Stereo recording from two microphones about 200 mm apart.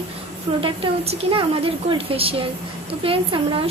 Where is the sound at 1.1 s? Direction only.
30° right (ahead or behind).